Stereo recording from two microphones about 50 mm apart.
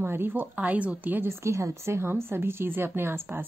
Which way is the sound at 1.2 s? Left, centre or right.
Right.